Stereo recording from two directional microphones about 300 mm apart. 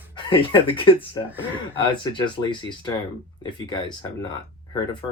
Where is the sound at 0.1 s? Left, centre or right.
Centre.